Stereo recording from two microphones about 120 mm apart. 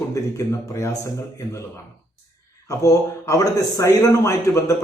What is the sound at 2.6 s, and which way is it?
Speech, 25° left (ahead or behind).